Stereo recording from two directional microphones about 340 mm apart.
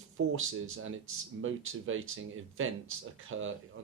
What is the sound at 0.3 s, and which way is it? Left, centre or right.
Speech, right.